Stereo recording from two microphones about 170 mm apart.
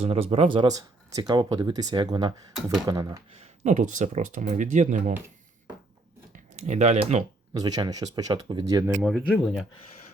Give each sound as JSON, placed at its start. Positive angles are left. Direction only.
{"t": 0.0, "sound": "speech", "side_deg": -35}
{"t": 3.6, "sound": "speech", "side_deg": -45}
{"t": 6.3, "sound": "speech", "side_deg": -45}
{"t": 7.5, "sound": "speech", "side_deg": -25}
{"t": 9.0, "sound": "speech", "side_deg": 0}